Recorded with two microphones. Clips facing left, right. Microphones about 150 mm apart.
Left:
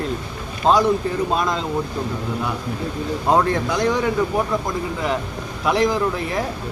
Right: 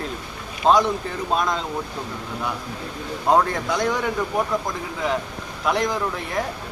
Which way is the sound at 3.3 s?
Centre (ahead or behind).